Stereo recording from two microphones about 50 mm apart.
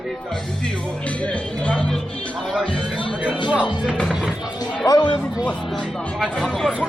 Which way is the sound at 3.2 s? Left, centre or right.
Right.